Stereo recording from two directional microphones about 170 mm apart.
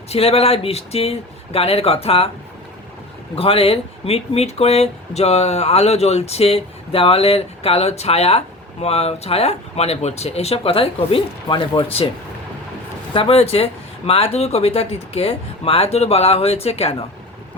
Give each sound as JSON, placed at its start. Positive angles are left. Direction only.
{"t": 0.1, "sound": "speech", "side_deg": 35}
{"t": 3.3, "sound": "speech", "side_deg": 35}
{"t": 13.1, "sound": "speech", "side_deg": 35}